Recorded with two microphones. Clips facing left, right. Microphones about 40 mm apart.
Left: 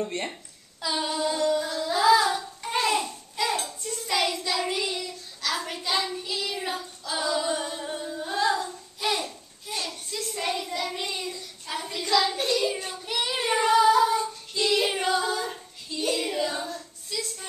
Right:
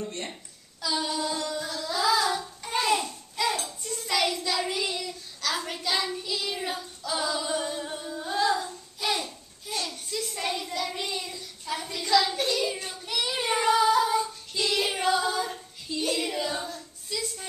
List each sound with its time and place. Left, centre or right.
0.0 s speech: left
0.3 s speech: centre
2.0 s a sound: centre
3.8 s hands: centre
4.1 s child singing: centre
5.9 s hands: centre
6.3 s child singing: centre
8.5 s a sound: centre
13.4 s child singing: centre